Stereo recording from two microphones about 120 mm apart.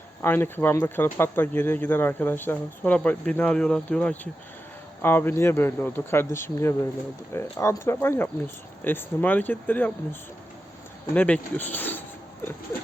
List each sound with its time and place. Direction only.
0.2 s speech: 20° left (ahead or behind)